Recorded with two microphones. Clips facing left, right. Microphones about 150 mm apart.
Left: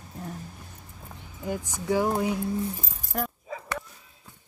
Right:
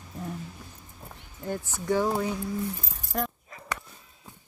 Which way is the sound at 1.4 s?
10° left (ahead or behind).